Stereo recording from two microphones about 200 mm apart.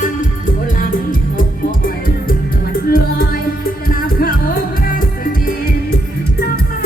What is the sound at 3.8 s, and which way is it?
Music, 45° left (ahead or behind).